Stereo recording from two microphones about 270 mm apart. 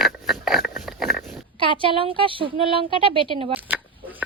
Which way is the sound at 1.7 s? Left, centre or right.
Centre.